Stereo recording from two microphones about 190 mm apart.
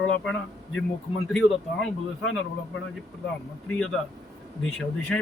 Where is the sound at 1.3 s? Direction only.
Centre (ahead or behind).